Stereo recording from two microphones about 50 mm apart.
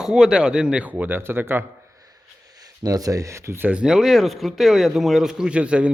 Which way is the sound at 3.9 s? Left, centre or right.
Centre.